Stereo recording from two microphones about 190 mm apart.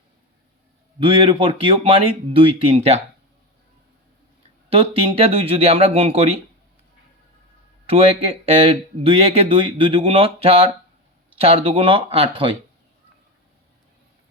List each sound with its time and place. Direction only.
0.9 s speech: 30° right (ahead or behind)
4.7 s speech: 30° right (ahead or behind)
7.9 s speech: 30° right (ahead or behind)